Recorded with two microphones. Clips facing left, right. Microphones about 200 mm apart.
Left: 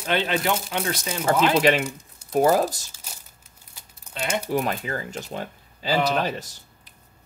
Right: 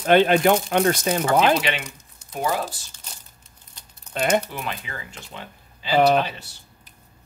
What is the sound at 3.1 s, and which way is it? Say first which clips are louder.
Crumpling: even; 10° left (ahead or behind).